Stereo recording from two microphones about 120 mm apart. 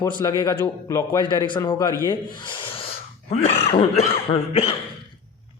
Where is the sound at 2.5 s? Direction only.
45° left (ahead or behind).